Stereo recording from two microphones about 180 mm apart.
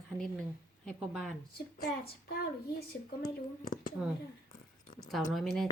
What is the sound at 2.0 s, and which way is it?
Speech, 60° left (ahead or behind).